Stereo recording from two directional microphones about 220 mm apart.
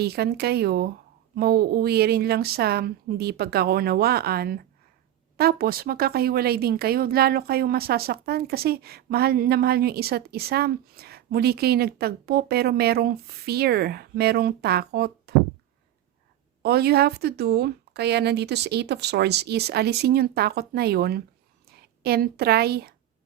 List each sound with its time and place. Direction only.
0.0 s speech: 45° right (ahead or behind)
16.6 s speech: 45° right (ahead or behind)